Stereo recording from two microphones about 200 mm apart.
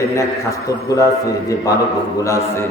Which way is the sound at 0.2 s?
15° left (ahead or behind).